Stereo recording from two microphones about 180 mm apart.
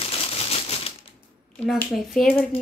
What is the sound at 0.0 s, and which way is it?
Typewriter, 30° left (ahead or behind).